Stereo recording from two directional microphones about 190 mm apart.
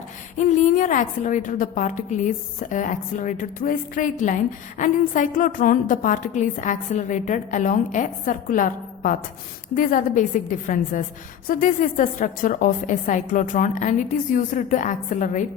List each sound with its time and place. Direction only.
0.3 s a woman's voice: 40° left (ahead or behind)